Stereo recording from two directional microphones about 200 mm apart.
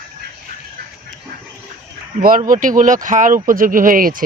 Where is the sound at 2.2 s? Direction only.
40° right (ahead or behind).